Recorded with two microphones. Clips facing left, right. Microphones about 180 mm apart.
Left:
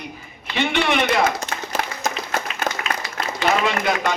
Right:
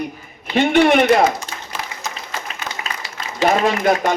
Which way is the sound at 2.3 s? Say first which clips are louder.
Left 4 dB; 65° left (ahead or behind).